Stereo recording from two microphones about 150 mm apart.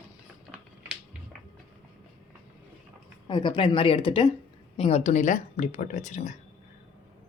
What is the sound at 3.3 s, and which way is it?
Speech, 30° left (ahead or behind).